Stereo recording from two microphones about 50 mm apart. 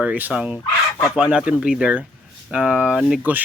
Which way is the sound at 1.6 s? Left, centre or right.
Centre.